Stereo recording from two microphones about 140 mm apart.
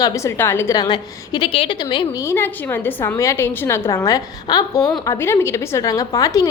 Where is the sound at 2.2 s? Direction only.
15° left (ahead or behind).